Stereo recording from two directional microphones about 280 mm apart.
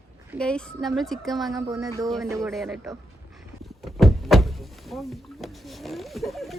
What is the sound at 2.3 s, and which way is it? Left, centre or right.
Speech, centre.